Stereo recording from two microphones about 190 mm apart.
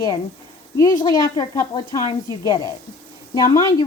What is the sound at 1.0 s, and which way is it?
A woman's voice, 20° left (ahead or behind).